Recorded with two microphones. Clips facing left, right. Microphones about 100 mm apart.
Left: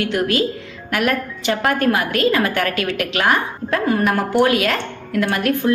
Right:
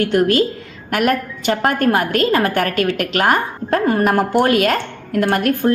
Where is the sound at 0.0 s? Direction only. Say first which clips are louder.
Right 4 dB; 45° right (ahead or behind).